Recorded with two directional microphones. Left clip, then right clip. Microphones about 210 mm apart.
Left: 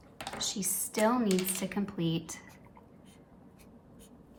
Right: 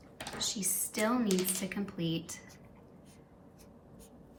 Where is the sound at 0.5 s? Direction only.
20° left (ahead or behind).